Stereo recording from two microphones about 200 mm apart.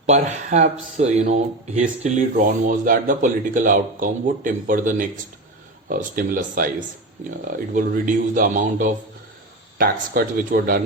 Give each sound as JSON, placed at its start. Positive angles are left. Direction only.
{"t": 0.0, "sound": "speech", "side_deg": -35}